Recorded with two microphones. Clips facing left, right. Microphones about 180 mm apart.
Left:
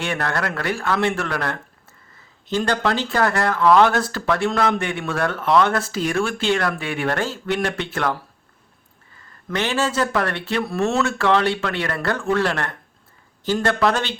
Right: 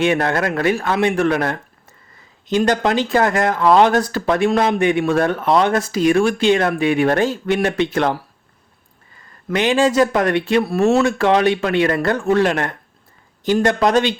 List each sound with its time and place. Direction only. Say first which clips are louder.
0.0 s speech: right 7 dB; 20° right (ahead or behind)
9.5 s speech: right 7 dB; 15° right (ahead or behind)